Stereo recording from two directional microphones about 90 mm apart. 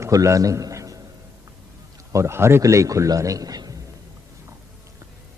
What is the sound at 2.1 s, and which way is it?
A man's voice, 30° right (ahead or behind).